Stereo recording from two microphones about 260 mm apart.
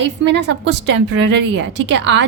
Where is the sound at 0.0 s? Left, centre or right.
Right.